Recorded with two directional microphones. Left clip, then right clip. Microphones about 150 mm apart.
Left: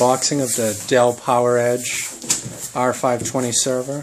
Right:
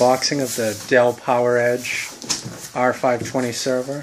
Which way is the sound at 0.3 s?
20° left (ahead or behind).